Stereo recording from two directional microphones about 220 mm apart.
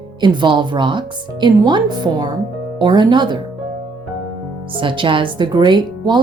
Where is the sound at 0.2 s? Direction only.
20° right (ahead or behind).